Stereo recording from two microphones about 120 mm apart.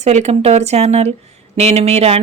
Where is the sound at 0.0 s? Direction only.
70° right (ahead or behind).